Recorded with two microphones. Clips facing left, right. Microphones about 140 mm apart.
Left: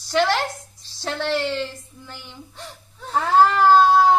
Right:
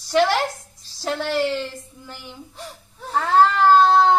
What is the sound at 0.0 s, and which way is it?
A woman's voice, 5° right (ahead or behind).